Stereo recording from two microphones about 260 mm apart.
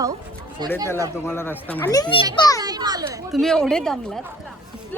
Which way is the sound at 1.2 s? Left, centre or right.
Centre.